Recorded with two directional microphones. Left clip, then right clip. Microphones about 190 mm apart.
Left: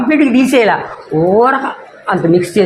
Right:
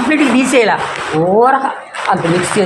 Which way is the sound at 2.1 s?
35° left (ahead or behind).